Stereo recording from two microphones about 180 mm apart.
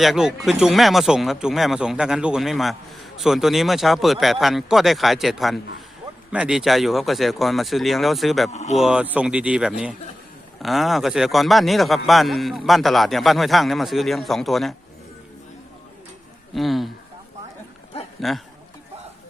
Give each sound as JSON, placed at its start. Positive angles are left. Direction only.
{"t": 0.0, "sound": "speech", "side_deg": 0}
{"t": 8.4, "sound": "speech", "side_deg": 40}
{"t": 8.8, "sound": "speech", "side_deg": -5}
{"t": 16.6, "sound": "speech", "side_deg": 0}
{"t": 18.2, "sound": "speech", "side_deg": 0}